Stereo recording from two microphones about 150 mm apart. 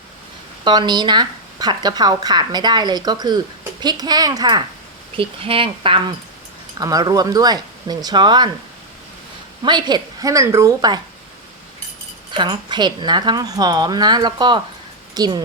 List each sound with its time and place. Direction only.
0.6 s a woman's voice: 30° right (ahead or behind)
5.1 s speech: 35° right (ahead or behind)
6.7 s a woman's voice: 25° right (ahead or behind)
9.6 s a woman's voice: 30° right (ahead or behind)
12.3 s a woman's voice: 30° right (ahead or behind)